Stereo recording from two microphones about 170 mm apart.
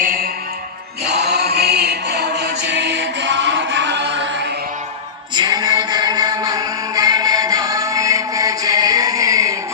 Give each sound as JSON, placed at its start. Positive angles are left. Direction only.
{"t": 0.0, "sound": "music", "side_deg": -55}
{"t": 1.0, "sound": "music", "side_deg": -75}
{"t": 5.3, "sound": "music", "side_deg": -25}